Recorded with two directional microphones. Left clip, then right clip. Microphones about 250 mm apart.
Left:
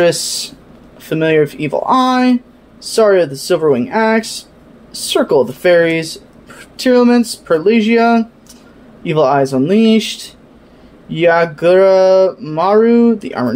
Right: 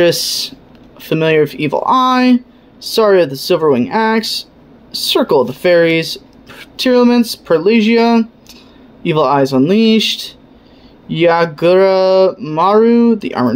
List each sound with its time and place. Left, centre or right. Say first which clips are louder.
0.0 s speech: right 1 dB; centre